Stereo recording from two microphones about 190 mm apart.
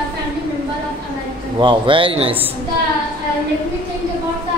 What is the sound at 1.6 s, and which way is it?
Speech, 25° right (ahead or behind).